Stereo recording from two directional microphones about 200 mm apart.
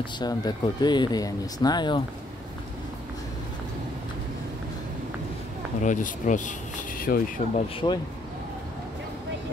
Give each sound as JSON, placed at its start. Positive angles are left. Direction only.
{"t": 0.0, "sound": "speech", "side_deg": 20}
{"t": 5.8, "sound": "speech", "side_deg": 40}
{"t": 7.8, "sound": "speech", "side_deg": 20}